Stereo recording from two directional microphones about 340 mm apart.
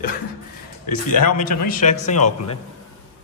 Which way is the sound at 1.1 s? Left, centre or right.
Left.